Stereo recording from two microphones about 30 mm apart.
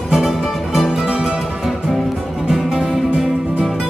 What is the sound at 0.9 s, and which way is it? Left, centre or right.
Music, right.